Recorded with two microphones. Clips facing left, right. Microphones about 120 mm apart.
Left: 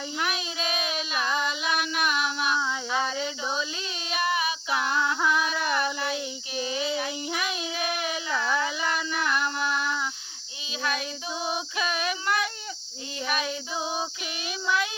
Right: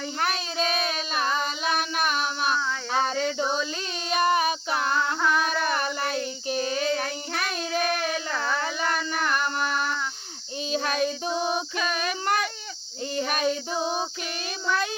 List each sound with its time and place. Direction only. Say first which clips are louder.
0.2 s child singing: right 4 dB; 40° right (ahead or behind)
1.4 s a sound: right 1 dB; 40° right (ahead or behind)
4.1 s female singing: right 5 dB; 45° right (ahead or behind)
5.4 s a sound: right 2 dB; 45° right (ahead or behind)
5.7 s child singing: right 1 dB; 45° right (ahead or behind)
8.0 s child singing: right 1 dB; 10° left (ahead or behind)
8.5 s a sound: even; 45° right (ahead or behind)
9.3 s mantra: right 1 dB; 45° right (ahead or behind)
10.7 s child singing: right 5 dB; 45° right (ahead or behind)
11.8 s child singing: right 1 dB; 5° left (ahead or behind)
12.2 s a sound: right 3 dB; 45° right (ahead or behind)
13.1 s child singing: right 4 dB; 45° right (ahead or behind)
13.5 s female singing: right 4 dB; 5° left (ahead or behind)